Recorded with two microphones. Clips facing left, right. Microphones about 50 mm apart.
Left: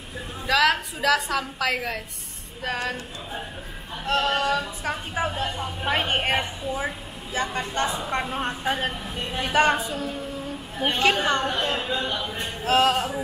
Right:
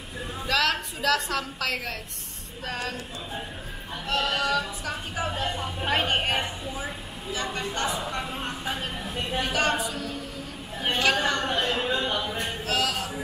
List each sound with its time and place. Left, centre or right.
0.5 s a woman's voice: centre
4.0 s a woman's voice: left
7.7 s speech: left
8.6 s speech: left
9.4 s a woman's voice: left
11.4 s a woman's voice: centre
12.6 s speech: left